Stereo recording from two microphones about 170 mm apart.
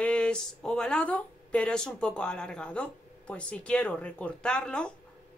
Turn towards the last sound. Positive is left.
turn(degrees=5)  # may be behind; listen again after turning